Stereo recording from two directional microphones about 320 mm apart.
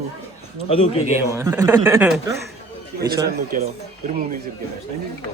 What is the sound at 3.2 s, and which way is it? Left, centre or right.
Speech, right.